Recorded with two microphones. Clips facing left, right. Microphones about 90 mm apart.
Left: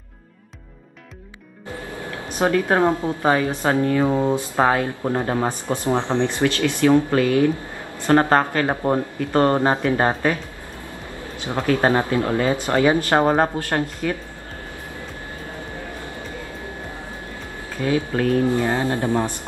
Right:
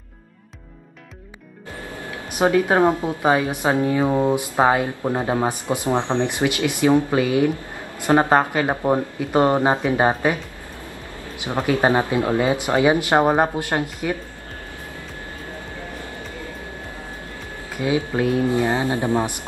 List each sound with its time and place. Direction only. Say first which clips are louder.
2.2 s speech: right 2 dB; 15° right (ahead or behind)
17.7 s speech: even; 15° right (ahead or behind)